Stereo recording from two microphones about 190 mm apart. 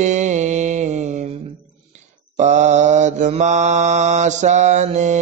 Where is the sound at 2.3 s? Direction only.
40° right (ahead or behind).